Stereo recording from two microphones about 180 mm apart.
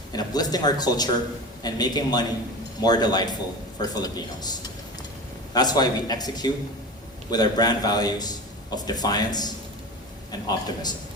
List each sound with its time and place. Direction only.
0.1 s speech: 20° left (ahead or behind)